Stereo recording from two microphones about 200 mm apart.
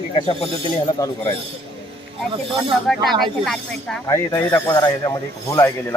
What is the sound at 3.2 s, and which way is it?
Speech, centre (ahead or behind).